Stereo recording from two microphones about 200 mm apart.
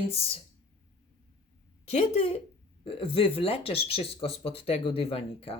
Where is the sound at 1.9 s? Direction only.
35° left (ahead or behind).